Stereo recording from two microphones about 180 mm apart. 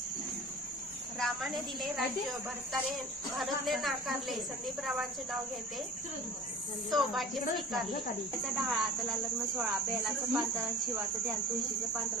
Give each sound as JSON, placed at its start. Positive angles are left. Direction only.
{"t": 1.2, "sound": "speech", "side_deg": 0}
{"t": 6.9, "sound": "speech", "side_deg": 0}